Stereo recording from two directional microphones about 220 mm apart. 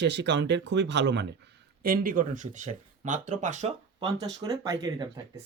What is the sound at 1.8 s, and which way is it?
Speech, 40° right (ahead or behind).